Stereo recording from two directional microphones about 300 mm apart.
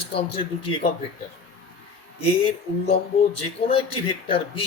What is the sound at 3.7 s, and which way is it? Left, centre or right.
Speech, centre.